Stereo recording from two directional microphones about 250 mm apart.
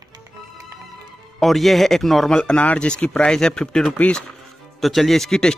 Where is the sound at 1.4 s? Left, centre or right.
Centre.